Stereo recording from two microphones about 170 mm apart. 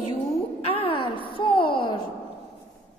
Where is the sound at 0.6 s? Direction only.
35° left (ahead or behind).